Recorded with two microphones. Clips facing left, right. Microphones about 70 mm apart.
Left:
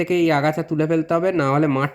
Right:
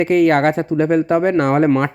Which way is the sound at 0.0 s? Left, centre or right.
Right.